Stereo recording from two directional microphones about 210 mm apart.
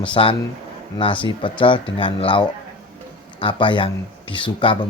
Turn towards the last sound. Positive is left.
turn(degrees=25)  # may be behind; listen again after turning